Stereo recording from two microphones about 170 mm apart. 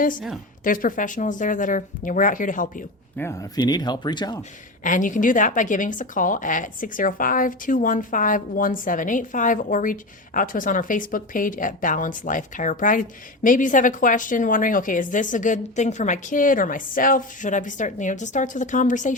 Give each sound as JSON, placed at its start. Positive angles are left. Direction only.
{"t": 0.6, "sound": "a woman's voice", "side_deg": 55}
{"t": 3.2, "sound": "speech", "side_deg": 15}
{"t": 4.8, "sound": "a woman's voice", "side_deg": 50}